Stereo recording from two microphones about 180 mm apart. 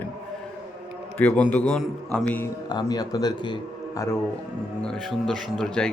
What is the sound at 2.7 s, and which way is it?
Speech, 20° left (ahead or behind).